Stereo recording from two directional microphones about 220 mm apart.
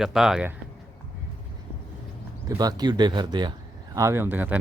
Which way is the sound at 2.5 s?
15° right (ahead or behind).